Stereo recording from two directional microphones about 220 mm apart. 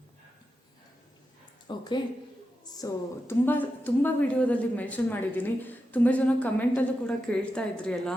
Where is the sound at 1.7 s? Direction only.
20° left (ahead or behind).